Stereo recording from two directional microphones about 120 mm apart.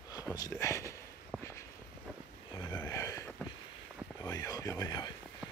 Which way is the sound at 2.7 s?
25° left (ahead or behind).